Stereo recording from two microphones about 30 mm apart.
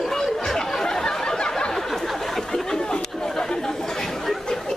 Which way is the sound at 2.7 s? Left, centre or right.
Left.